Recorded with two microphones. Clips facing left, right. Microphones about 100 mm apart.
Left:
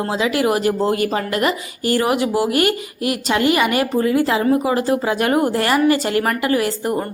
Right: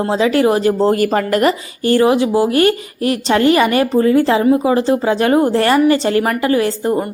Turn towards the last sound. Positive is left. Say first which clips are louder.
# right 4 dB
turn(degrees=-30)  # may be behind; listen again after turning